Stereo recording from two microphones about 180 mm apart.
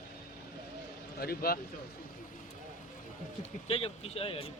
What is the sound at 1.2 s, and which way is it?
Speech, 60° left (ahead or behind).